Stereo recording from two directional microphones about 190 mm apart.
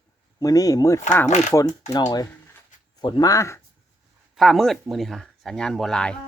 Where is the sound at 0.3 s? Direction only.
20° left (ahead or behind).